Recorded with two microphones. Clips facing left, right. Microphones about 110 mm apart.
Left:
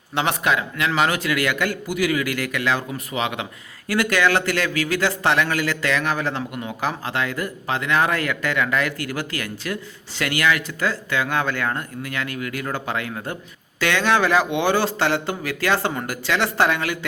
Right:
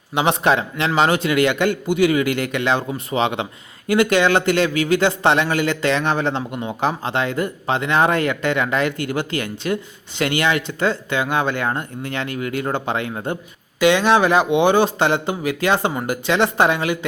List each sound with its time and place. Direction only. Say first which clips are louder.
0.1 s speech: right 4 dB; 15° right (ahead or behind)
0.4 s a man's voice: right 4 dB; 35° right (ahead or behind)